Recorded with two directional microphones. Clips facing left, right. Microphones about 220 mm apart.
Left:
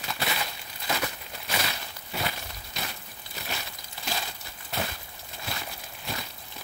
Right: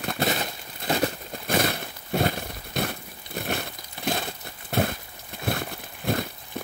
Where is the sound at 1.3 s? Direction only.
50° right (ahead or behind).